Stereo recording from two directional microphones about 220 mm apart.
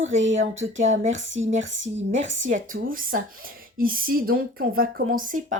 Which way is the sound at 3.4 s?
40° right (ahead or behind).